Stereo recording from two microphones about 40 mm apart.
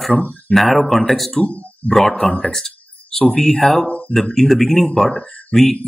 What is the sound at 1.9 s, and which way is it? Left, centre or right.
Speech, centre.